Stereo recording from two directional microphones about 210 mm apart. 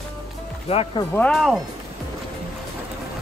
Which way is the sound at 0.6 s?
25° left (ahead or behind).